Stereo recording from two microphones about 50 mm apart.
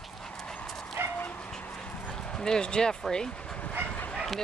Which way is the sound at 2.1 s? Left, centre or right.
Centre.